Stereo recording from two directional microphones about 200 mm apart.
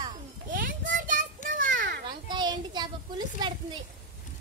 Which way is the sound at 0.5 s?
45° right (ahead or behind).